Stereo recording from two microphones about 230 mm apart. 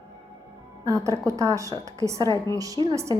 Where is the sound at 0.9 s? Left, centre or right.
Centre.